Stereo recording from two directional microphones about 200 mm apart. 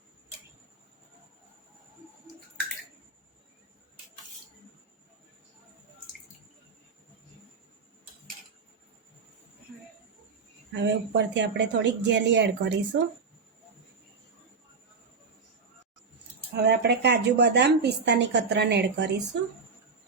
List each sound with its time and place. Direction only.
10.8 s a woman's voice: 60° right (ahead or behind)
16.6 s a woman's voice: 55° right (ahead or behind)